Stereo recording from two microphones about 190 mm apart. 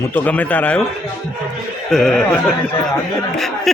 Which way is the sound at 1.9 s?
Centre (ahead or behind).